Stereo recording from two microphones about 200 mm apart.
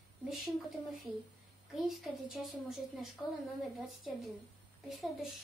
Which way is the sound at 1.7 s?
Centre (ahead or behind).